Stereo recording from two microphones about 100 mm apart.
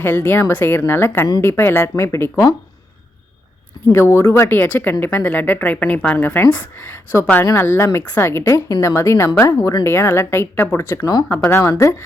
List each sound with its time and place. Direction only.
0.0 s speech: 20° left (ahead or behind)
3.9 s speech: 25° left (ahead or behind)
9.6 s speech: 40° left (ahead or behind)
9.8 s speech: 25° left (ahead or behind)